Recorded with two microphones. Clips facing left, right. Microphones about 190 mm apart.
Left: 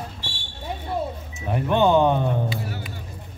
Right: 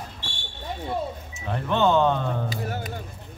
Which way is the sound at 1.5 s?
15° left (ahead or behind).